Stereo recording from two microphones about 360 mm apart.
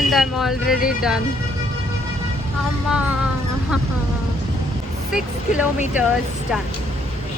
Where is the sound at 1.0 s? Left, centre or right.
Centre.